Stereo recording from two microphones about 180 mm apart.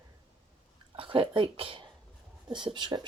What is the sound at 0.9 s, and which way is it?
Speech, 30° right (ahead or behind).